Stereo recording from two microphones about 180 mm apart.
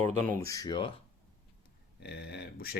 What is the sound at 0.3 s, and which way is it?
Speech, 20° left (ahead or behind).